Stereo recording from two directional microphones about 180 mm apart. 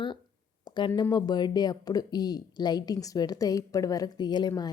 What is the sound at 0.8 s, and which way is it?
Speech, 25° left (ahead or behind).